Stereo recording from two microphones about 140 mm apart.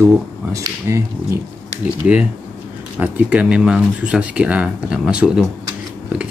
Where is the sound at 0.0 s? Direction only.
20° right (ahead or behind).